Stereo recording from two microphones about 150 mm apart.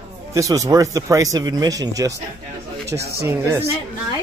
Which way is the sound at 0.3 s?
20° right (ahead or behind).